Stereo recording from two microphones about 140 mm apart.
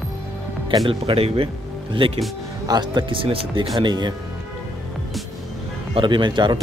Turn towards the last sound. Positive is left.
turn(degrees=-35)  # may be behind; listen again after turning